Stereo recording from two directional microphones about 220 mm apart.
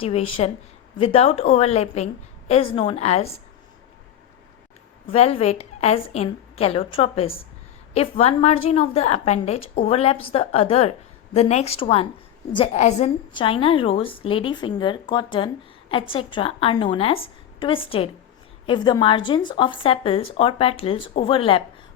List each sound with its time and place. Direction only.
0.0 s a woman's voice: 25° left (ahead or behind)
5.1 s a woman's voice: 30° left (ahead or behind)